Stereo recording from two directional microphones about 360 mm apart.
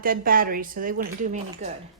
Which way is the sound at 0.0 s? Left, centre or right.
Right.